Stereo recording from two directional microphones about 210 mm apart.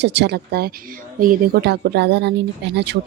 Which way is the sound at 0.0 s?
55° right (ahead or behind).